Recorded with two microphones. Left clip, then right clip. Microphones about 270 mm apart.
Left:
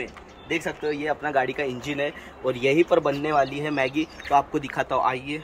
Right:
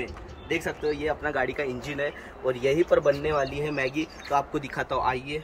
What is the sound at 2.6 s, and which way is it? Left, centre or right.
Speech, left.